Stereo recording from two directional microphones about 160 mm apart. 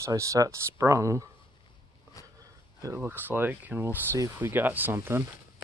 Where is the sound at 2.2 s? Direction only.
20° left (ahead or behind).